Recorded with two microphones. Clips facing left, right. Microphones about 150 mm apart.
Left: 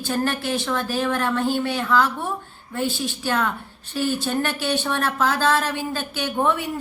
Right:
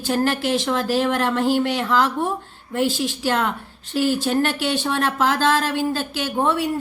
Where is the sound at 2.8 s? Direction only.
90° right.